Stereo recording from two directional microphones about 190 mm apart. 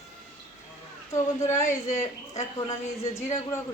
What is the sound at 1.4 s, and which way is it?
A woman's voice, 15° left (ahead or behind).